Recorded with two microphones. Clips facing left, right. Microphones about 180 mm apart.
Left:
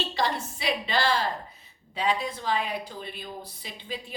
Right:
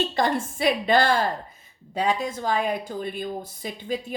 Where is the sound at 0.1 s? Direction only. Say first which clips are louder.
Right 5 dB; 50° right (ahead or behind).